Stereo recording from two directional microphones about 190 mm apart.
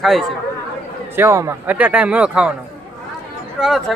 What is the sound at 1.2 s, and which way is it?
Speech, 15° right (ahead or behind).